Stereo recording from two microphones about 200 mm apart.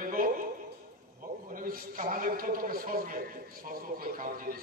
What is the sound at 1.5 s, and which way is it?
A man's voice, 45° right (ahead or behind).